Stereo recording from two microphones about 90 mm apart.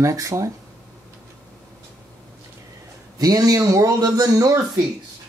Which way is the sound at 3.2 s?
45° right (ahead or behind).